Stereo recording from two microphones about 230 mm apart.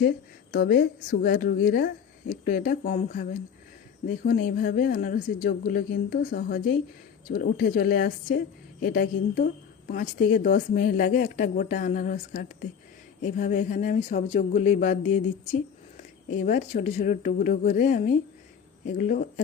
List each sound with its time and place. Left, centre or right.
0.5 s a woman's voice: left
16.4 s a woman's voice: left